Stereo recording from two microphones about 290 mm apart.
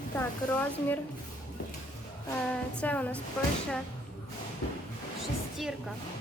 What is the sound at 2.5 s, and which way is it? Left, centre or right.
Speech, centre.